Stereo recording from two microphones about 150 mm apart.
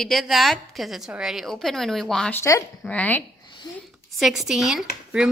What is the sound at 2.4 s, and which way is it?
Speech, 20° left (ahead or behind).